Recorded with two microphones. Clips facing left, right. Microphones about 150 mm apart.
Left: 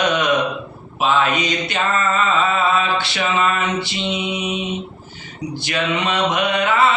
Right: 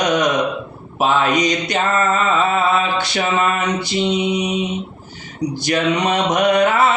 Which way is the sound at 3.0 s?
40° right (ahead or behind).